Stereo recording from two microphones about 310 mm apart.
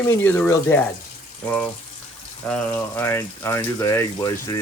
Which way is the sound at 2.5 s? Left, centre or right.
Centre.